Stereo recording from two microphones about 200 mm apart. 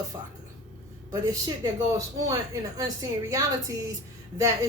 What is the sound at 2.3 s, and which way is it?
Speech, 15° right (ahead or behind).